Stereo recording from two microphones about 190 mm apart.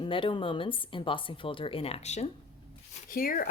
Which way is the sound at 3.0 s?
50° left (ahead or behind).